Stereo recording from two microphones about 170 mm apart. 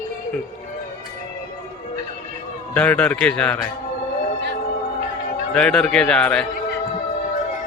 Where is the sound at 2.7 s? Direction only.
5° left (ahead or behind).